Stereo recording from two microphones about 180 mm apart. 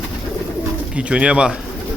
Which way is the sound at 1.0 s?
5° right (ahead or behind).